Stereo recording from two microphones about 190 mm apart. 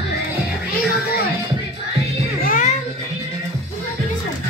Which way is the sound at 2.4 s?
45° left (ahead or behind).